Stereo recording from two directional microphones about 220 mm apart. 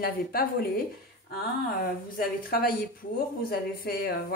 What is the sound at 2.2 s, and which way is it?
Speech, 40° left (ahead or behind).